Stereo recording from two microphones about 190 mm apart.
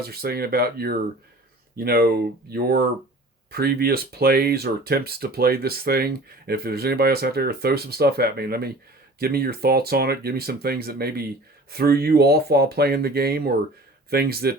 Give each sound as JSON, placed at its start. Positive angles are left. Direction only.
{"t": 0.0, "sound": "speech", "side_deg": -55}